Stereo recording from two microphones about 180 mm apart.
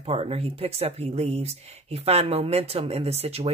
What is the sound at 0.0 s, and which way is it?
Speech, 35° right (ahead or behind).